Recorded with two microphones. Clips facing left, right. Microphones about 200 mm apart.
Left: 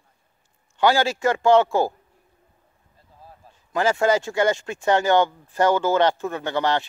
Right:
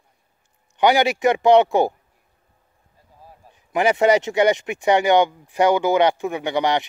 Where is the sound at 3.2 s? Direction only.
15° right (ahead or behind).